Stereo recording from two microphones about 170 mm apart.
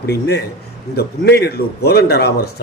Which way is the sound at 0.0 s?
70° left (ahead or behind).